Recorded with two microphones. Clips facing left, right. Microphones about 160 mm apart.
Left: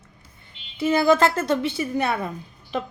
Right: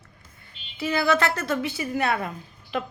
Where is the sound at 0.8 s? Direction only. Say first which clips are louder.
Left 5 dB; 25° left (ahead or behind).